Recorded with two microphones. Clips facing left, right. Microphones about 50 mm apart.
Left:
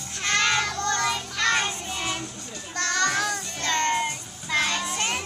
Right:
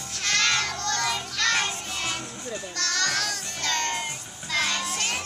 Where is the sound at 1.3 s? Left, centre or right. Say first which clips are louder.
Left 1 dB; centre.